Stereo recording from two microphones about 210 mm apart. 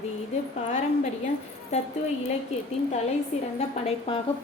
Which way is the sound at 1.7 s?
35° left (ahead or behind).